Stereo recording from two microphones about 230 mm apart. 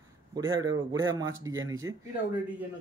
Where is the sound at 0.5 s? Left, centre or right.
Centre.